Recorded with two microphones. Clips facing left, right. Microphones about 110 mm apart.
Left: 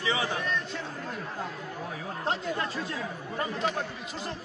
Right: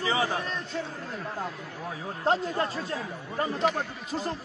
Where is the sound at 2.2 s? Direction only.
35° right (ahead or behind).